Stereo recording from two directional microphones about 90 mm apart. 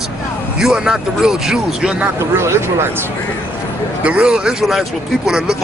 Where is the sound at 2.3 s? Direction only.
30° right (ahead or behind).